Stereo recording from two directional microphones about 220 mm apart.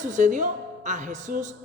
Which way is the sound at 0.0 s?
35° right (ahead or behind).